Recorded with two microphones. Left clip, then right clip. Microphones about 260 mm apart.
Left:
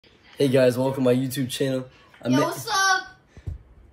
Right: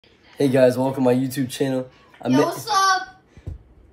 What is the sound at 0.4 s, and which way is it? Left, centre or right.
Speech, centre.